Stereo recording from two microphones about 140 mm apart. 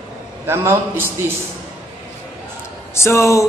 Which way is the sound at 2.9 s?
20° left (ahead or behind).